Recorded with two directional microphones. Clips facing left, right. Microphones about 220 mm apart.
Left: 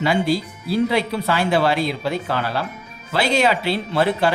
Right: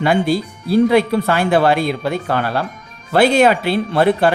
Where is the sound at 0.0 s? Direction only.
50° right (ahead or behind).